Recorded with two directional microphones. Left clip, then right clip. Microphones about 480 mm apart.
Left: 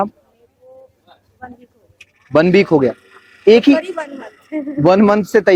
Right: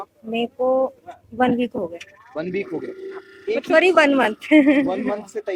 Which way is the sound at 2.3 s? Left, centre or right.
Left.